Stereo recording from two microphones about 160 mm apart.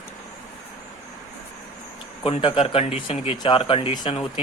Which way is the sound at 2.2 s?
35° left (ahead or behind).